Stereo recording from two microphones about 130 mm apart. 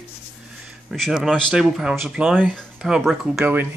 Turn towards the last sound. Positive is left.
turn(degrees=-15)  # may be behind; listen again after turning